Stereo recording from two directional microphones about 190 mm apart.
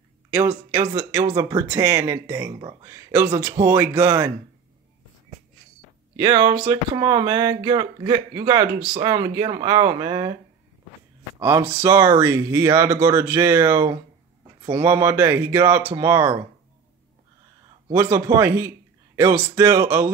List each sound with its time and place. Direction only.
0.3 s speech: 10° right (ahead or behind)
6.1 s speech: 25° right (ahead or behind)
11.3 s speech: 10° right (ahead or behind)
17.9 s speech: 15° right (ahead or behind)